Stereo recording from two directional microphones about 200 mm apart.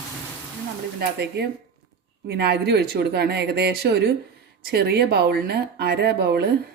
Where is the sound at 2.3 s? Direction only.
55° right (ahead or behind).